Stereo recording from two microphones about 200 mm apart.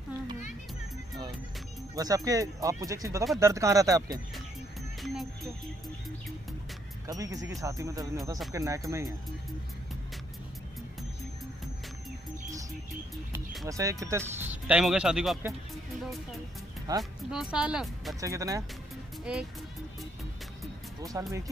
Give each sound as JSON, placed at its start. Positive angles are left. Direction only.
{"t": 2.0, "sound": "speech", "side_deg": -20}
{"t": 5.0, "sound": "speech", "side_deg": 0}
{"t": 7.1, "sound": "speech", "side_deg": -15}
{"t": 13.7, "sound": "speech", "side_deg": -15}
{"t": 16.9, "sound": "speech", "side_deg": -20}
{"t": 17.3, "sound": "speech", "side_deg": -5}
{"t": 18.2, "sound": "speech", "side_deg": -15}
{"t": 21.0, "sound": "speech", "side_deg": -15}